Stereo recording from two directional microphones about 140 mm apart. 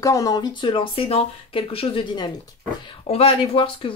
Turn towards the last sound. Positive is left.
turn(degrees=40)  # may be behind; listen again after turning